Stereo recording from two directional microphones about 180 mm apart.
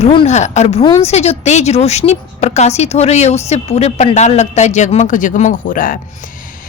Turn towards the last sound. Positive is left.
turn(degrees=50)  # may be behind; listen again after turning